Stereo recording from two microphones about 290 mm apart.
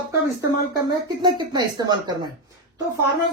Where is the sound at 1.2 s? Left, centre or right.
Centre.